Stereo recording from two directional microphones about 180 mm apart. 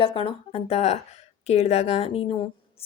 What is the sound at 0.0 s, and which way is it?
A woman's voice, 30° left (ahead or behind).